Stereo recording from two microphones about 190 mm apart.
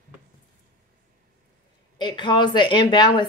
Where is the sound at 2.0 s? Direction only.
25° left (ahead or behind).